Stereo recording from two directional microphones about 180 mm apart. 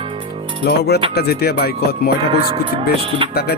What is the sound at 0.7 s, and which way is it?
Speech, 65° left (ahead or behind).